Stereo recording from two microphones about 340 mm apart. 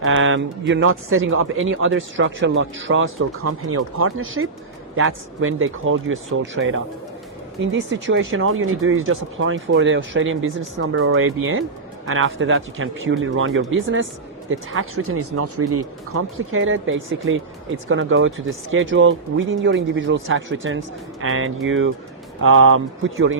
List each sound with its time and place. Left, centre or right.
0.0 s speech: right